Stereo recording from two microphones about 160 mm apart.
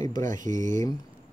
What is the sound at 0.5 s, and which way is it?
Speech, 50° right (ahead or behind).